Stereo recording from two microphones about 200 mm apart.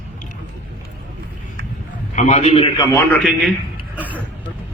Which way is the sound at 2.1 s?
35° left (ahead or behind).